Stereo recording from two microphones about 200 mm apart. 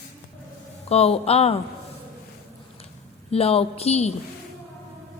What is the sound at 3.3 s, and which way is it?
Speech, 30° left (ahead or behind).